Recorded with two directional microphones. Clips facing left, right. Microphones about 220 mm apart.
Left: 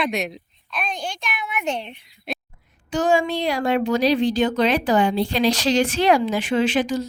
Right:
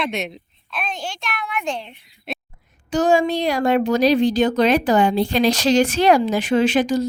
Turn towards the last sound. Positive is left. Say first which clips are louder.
# right 3 dB
turn(degrees=-40)  # may be behind; listen again after turning